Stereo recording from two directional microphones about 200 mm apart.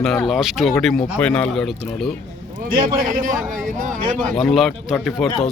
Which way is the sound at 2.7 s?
40° right (ahead or behind).